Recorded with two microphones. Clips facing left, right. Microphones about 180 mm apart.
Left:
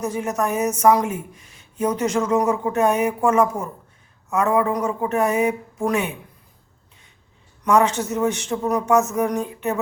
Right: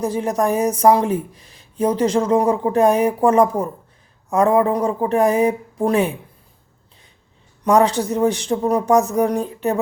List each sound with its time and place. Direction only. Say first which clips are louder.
0.0 s a woman's voice: right 4 dB; 30° right (ahead or behind)
7.6 s a woman's voice: right 3 dB; 35° right (ahead or behind)